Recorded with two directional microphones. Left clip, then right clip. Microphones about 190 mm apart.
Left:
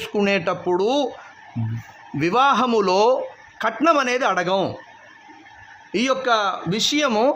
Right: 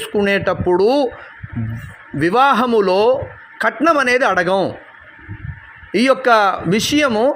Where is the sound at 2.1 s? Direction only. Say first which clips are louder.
Right 4 dB; 10° right (ahead or behind).